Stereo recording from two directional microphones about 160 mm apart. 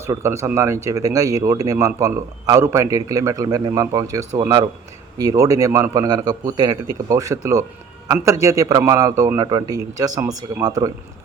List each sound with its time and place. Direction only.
0.0 s speech: 15° right (ahead or behind)